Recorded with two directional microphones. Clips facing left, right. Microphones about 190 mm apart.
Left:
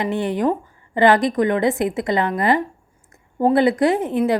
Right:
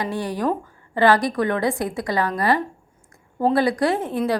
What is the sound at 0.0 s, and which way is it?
A woman's voice, 20° left (ahead or behind).